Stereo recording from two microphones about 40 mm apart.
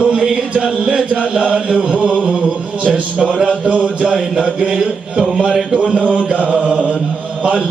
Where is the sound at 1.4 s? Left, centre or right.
Right.